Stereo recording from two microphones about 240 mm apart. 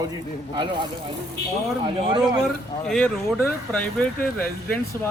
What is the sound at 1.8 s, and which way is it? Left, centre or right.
Speech, right.